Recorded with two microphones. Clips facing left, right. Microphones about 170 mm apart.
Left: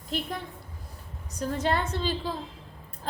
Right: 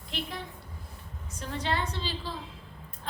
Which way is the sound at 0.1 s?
45° left (ahead or behind).